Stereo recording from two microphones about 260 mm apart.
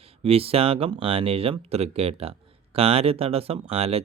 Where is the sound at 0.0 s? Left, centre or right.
Right.